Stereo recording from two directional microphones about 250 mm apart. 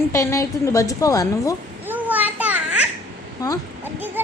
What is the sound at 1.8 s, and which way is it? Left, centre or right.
Children playing, centre.